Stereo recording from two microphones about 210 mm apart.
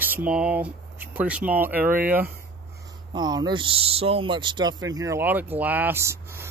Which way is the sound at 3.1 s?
20° right (ahead or behind).